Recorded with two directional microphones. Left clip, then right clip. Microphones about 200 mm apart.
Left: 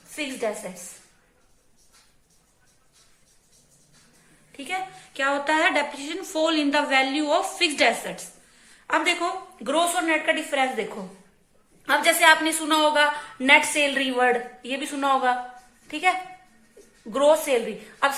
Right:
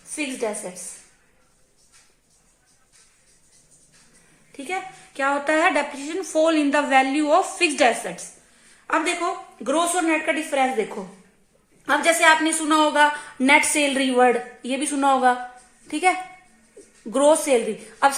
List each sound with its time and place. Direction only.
0.2 s a woman's voice: 45° right (ahead or behind)
4.5 s a woman's voice: 50° right (ahead or behind)
11.9 s a woman's voice: 50° right (ahead or behind)